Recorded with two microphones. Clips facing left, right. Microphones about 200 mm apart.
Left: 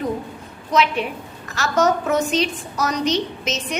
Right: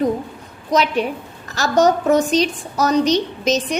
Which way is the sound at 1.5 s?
35° right (ahead or behind).